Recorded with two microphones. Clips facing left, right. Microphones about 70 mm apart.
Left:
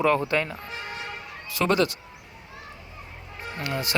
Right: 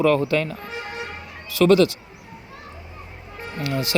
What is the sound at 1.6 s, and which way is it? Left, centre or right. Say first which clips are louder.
Speech: right 7 dB; left.